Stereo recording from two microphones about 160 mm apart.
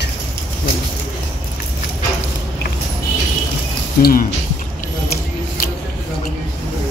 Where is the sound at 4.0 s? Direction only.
65° left (ahead or behind).